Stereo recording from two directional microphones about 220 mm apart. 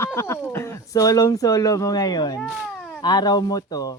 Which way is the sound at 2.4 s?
Centre (ahead or behind).